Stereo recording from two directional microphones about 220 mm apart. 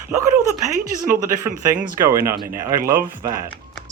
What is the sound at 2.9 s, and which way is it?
Speech, 15° right (ahead or behind).